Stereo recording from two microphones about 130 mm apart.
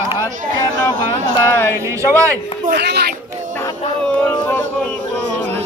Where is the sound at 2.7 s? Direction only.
90° right.